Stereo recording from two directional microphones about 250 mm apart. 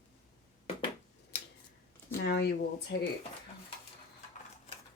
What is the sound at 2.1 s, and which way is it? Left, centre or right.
Speech, left.